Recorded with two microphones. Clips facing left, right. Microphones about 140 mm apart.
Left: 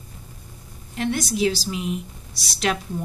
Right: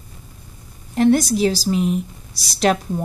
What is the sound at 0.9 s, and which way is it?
Speech, 40° right (ahead or behind).